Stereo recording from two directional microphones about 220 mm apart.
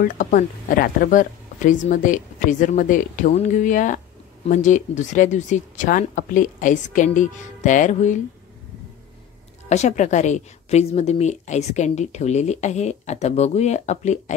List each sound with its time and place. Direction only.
0.0 s a woman's voice: 35° left (ahead or behind)
9.7 s a woman's voice: 30° left (ahead or behind)